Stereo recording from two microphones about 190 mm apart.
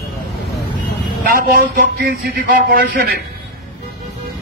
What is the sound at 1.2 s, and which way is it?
A man's voice, 50° right (ahead or behind).